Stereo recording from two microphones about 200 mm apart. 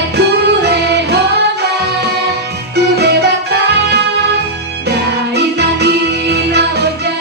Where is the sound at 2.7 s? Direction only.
55° right (ahead or behind).